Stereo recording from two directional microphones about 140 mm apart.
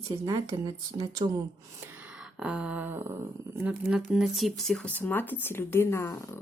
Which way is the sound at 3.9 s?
5° right (ahead or behind).